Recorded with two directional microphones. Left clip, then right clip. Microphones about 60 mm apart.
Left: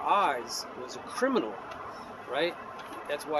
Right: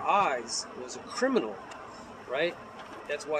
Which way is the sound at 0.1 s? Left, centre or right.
Left.